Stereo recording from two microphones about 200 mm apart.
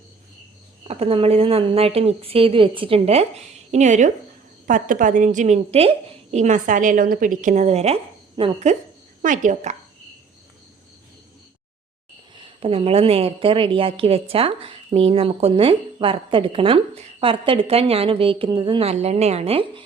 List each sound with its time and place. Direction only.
0.9 s a woman's voice: 30° right (ahead or behind)
12.4 s a woman's voice: 30° right (ahead or behind)